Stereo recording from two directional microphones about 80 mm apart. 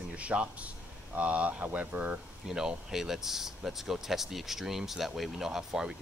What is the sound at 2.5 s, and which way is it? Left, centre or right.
Speech, centre.